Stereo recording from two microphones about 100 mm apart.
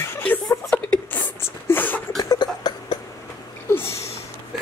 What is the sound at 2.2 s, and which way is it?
Cough, 45° left (ahead or behind).